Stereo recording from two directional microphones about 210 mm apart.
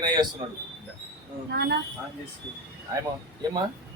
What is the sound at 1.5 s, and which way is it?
Speech, 50° right (ahead or behind).